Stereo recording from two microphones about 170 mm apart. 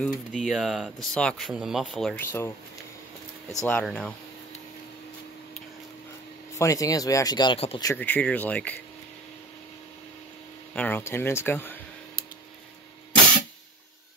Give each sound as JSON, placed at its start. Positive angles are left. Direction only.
{"t": 0.0, "sound": "speech", "side_deg": 0}
{"t": 3.6, "sound": "speech", "side_deg": 5}
{"t": 6.6, "sound": "speech", "side_deg": 20}
{"t": 7.8, "sound": "speech", "side_deg": 10}
{"t": 10.7, "sound": "speech", "side_deg": 10}